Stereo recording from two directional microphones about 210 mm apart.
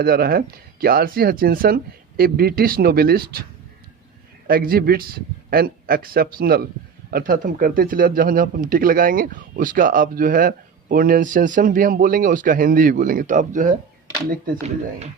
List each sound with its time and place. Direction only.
0.0 s speech: 45° right (ahead or behind)
4.4 s speech: 45° right (ahead or behind)